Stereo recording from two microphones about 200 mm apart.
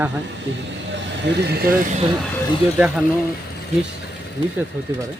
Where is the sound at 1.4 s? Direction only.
50° right (ahead or behind).